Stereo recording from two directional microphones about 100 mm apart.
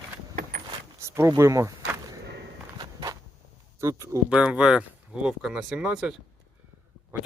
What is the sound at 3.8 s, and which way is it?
Speech, 30° right (ahead or behind).